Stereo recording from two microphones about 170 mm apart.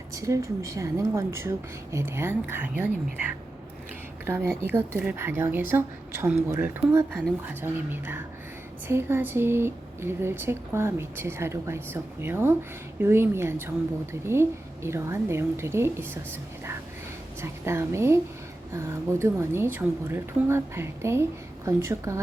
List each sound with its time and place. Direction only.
0.1 s a woman's voice: 20° right (ahead or behind)
4.3 s a woman's voice: 15° right (ahead or behind)
17.4 s a woman's voice: 15° right (ahead or behind)